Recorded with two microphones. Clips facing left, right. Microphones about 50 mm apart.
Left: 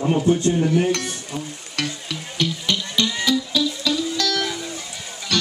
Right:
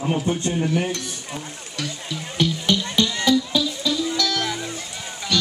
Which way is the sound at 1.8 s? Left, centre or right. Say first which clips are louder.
Left 2 dB; left.